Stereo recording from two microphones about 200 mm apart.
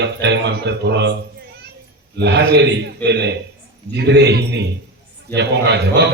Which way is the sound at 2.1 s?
55° right (ahead or behind).